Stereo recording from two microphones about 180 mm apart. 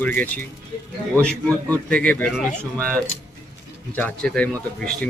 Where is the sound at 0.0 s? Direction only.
10° left (ahead or behind).